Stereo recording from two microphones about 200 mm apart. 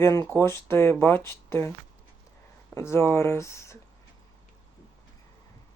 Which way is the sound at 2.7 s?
10° left (ahead or behind).